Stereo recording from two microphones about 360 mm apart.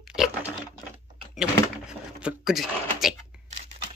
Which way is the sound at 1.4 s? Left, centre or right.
Centre.